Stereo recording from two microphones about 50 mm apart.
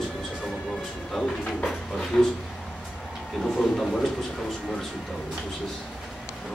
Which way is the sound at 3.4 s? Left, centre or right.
Centre.